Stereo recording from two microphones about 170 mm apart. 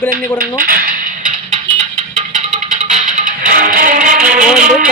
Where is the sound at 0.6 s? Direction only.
60° right (ahead or behind).